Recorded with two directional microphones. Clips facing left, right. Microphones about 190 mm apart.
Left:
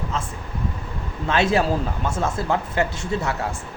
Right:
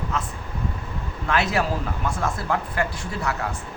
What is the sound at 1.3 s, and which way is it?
Speech, 25° left (ahead or behind).